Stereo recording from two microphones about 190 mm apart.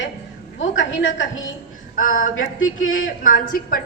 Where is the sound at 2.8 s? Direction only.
90° left.